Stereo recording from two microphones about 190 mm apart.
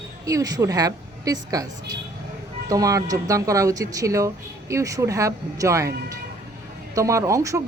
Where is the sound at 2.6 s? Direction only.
20° right (ahead or behind).